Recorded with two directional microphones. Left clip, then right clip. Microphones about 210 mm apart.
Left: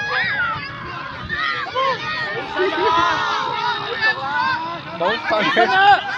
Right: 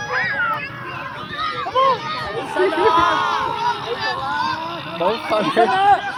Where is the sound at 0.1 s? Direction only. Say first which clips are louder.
Right 1 dB; 50° right (ahead or behind).